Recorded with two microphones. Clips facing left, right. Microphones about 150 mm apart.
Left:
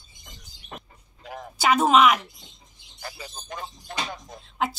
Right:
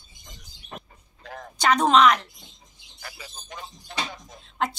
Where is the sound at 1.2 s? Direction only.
10° left (ahead or behind).